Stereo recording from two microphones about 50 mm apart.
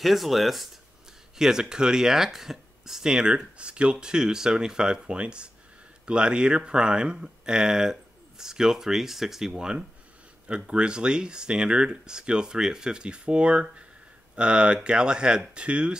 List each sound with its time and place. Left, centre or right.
0.0 s speech: centre
9.6 s speech: centre